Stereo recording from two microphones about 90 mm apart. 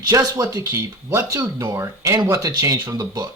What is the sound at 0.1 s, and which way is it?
A man's voice, 45° right (ahead or behind).